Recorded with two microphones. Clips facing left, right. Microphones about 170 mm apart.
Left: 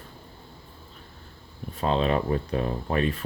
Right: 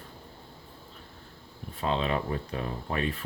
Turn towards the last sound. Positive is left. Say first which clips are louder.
# left 5 dB
turn(degrees=35)  # may be behind; listen again after turning